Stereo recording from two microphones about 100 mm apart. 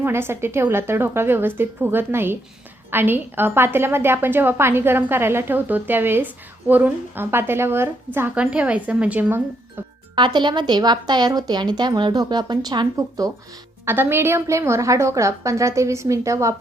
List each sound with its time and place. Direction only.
0.0 s a woman's voice: 25° right (ahead or behind)
10.2 s a woman's voice: 50° right (ahead or behind)
13.0 s speech: 35° right (ahead or behind)
13.8 s a woman's voice: 20° right (ahead or behind)